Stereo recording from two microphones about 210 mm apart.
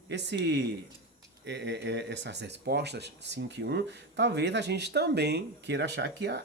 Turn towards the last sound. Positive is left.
turn(degrees=-55)  # may be behind; listen again after turning